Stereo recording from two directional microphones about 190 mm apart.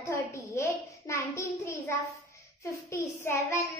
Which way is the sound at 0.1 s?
15° left (ahead or behind).